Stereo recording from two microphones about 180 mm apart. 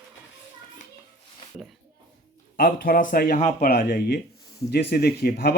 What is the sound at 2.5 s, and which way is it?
Speech, 55° left (ahead or behind).